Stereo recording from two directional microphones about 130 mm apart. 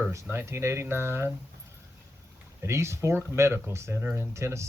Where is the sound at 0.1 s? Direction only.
20° right (ahead or behind).